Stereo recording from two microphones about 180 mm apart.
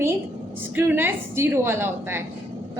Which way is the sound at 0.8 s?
10° right (ahead or behind).